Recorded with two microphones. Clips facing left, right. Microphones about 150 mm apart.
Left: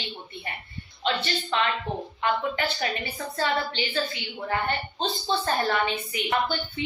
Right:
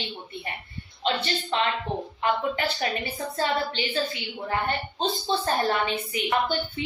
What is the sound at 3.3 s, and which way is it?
A woman's voice, 30° right (ahead or behind).